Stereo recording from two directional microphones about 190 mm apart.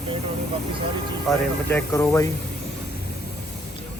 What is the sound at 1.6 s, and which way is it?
Speech, 10° left (ahead or behind).